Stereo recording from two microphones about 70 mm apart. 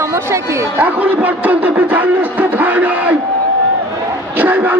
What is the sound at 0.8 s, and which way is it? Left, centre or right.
Speech, right.